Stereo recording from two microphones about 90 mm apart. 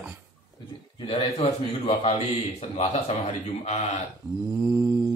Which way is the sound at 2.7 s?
90° left.